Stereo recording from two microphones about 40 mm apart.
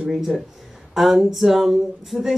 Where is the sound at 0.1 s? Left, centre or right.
Centre.